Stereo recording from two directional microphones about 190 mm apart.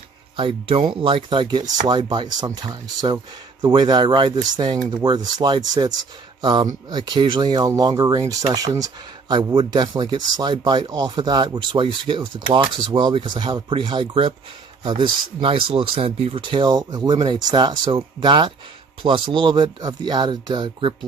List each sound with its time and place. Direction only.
0.3 s speech: 25° right (ahead or behind)